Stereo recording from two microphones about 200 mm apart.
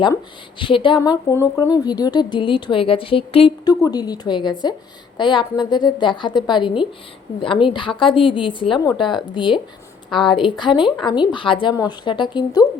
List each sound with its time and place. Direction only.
0.6 s speech: 25° left (ahead or behind)